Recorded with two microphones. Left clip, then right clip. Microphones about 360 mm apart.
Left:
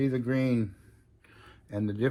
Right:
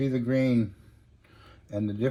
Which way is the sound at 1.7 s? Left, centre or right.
Centre.